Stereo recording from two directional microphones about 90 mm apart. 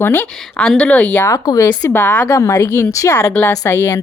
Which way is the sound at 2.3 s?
30° left (ahead or behind).